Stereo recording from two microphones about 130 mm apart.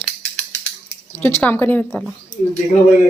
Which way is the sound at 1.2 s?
15° left (ahead or behind).